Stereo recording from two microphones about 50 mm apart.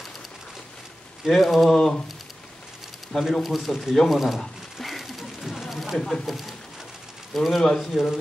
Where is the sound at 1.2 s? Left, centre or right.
Centre.